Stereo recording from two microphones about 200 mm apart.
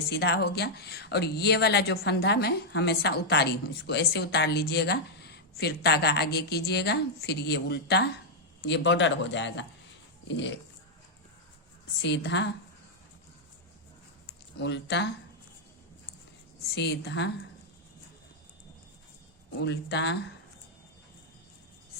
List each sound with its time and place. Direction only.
0.1 s speech: 55° left (ahead or behind)
12.0 s speech: 60° left (ahead or behind)
14.6 s speech: 60° left (ahead or behind)
16.7 s speech: 55° left (ahead or behind)
19.5 s speech: 55° left (ahead or behind)